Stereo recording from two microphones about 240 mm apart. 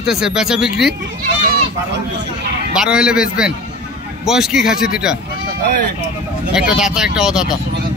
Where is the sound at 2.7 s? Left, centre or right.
Centre.